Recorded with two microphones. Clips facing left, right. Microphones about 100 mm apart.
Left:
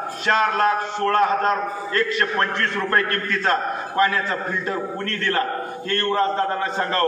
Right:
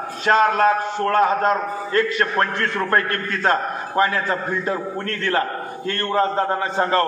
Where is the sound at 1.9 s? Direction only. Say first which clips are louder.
Right 3 dB; 30° right (ahead or behind).